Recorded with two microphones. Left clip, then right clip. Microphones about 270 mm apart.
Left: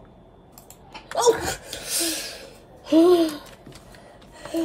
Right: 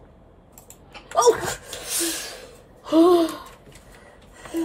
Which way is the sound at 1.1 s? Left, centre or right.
Centre.